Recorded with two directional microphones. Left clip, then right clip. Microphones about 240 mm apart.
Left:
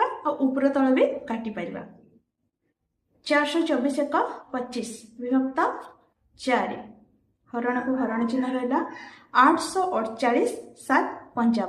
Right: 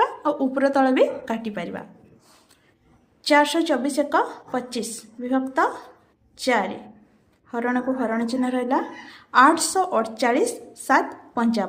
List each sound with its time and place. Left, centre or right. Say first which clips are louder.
0.0 s a woman's voice: right 3 dB; right
3.2 s a woman's voice: right 4 dB; right